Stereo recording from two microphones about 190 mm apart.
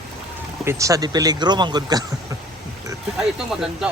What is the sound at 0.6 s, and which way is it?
Speech, 15° right (ahead or behind).